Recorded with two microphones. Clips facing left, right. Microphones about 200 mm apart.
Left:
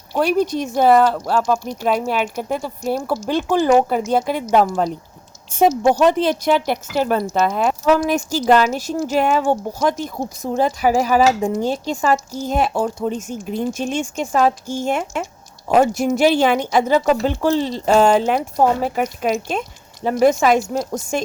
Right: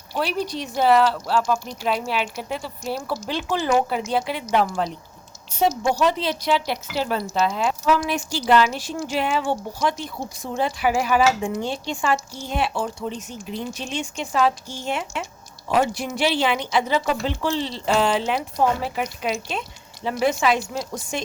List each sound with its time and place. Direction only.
0.2 s a woman's voice: 50° left (ahead or behind)